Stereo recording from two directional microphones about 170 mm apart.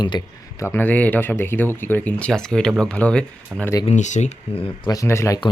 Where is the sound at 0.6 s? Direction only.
15° left (ahead or behind).